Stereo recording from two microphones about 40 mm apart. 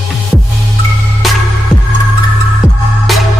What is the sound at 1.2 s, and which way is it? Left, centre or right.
Music, centre.